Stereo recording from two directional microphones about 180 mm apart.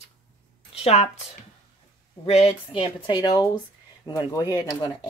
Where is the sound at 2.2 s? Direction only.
35° left (ahead or behind).